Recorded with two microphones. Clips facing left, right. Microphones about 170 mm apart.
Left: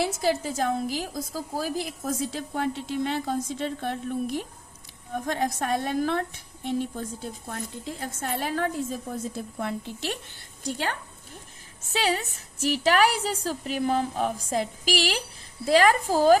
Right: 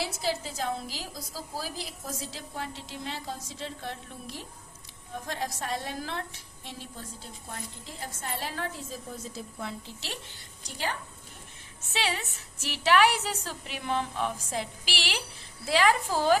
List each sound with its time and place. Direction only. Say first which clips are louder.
0.0 s a woman's voice: left 6 dB; 50° left (ahead or behind)
11.9 s a woman's voice: left 6 dB; 40° left (ahead or behind)